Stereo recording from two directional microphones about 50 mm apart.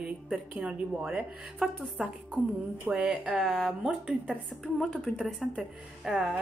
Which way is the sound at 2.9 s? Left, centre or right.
Centre.